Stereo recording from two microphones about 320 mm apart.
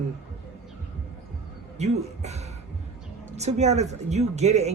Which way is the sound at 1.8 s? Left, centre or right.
Centre.